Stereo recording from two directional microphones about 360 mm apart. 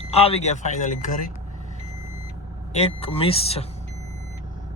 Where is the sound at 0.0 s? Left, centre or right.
Centre.